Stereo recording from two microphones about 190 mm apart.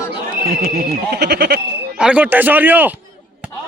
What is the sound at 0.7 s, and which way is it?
Speech, 55° right (ahead or behind).